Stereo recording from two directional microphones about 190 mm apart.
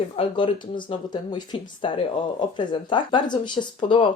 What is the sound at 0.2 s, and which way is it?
Speech, 25° left (ahead or behind).